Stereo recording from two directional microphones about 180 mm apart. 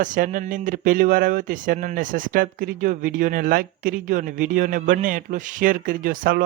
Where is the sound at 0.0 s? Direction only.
45° right (ahead or behind).